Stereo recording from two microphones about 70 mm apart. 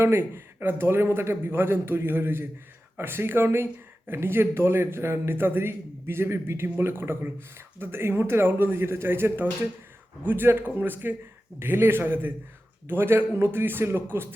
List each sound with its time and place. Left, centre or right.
0.0 s a man's voice: right